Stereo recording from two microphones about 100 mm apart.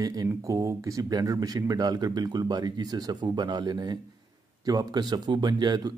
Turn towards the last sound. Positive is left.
turn(degrees=-45)  # may be behind; listen again after turning